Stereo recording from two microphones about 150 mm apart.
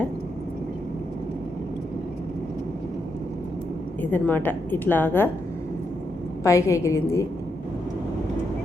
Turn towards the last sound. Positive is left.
turn(degrees=20)  # may be behind; listen again after turning